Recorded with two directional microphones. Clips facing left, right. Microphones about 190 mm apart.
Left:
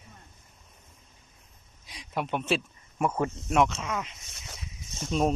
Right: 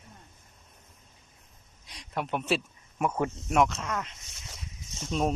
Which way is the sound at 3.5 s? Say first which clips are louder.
Even; centre (ahead or behind).